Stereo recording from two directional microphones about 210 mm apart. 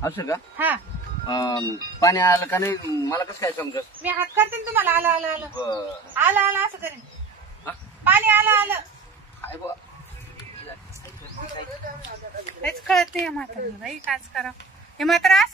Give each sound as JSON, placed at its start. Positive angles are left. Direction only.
{"t": 0.0, "sound": "speech", "side_deg": 15}
{"t": 0.6, "sound": "speech", "side_deg": -10}
{"t": 1.3, "sound": "speech", "side_deg": 15}
{"t": 4.0, "sound": "speech", "side_deg": -10}
{"t": 8.0, "sound": "a man's voice", "side_deg": -10}
{"t": 12.6, "sound": "a woman's voice", "side_deg": 0}